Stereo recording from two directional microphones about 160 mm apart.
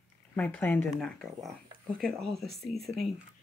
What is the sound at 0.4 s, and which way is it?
Speech, 10° left (ahead or behind).